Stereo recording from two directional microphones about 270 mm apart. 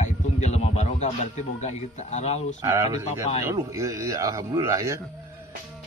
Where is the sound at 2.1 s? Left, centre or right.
Left.